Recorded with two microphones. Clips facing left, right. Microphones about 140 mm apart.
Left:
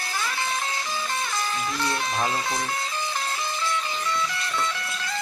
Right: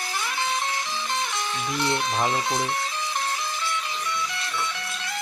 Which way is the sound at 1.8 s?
20° right (ahead or behind).